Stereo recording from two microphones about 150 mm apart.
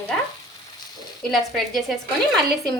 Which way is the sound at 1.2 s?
Centre (ahead or behind).